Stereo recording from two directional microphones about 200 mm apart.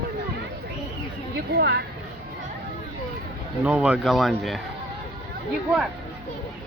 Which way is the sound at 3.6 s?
5° right (ahead or behind).